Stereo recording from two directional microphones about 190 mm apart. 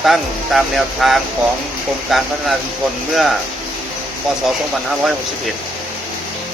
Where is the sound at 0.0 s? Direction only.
Centre (ahead or behind).